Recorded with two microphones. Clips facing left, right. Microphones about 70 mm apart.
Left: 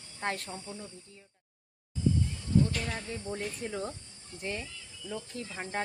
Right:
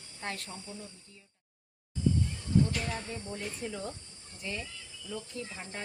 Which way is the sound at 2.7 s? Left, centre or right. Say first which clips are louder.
Even; centre.